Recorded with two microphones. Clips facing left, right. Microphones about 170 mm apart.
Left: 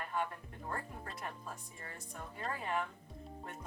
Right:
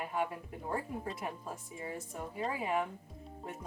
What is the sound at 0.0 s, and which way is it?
A woman's voice, 10° right (ahead or behind).